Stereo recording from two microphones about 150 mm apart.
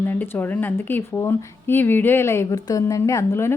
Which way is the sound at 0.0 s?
10° left (ahead or behind).